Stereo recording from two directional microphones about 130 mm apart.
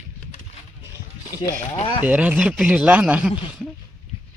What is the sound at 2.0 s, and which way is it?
A man's voice, 10° right (ahead or behind).